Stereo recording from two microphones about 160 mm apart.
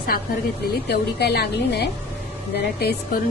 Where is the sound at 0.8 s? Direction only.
90° left.